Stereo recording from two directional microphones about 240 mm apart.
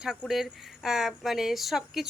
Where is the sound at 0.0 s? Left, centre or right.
Centre.